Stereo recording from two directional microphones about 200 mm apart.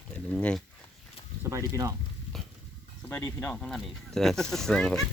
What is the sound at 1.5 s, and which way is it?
Speech, 15° right (ahead or behind).